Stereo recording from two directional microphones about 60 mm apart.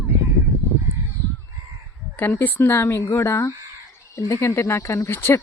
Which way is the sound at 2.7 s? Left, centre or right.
Left.